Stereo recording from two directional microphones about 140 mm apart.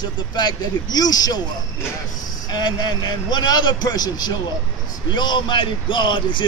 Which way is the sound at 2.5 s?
30° left (ahead or behind).